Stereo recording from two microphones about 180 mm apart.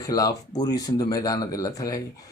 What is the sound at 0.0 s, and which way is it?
Speech, 20° left (ahead or behind).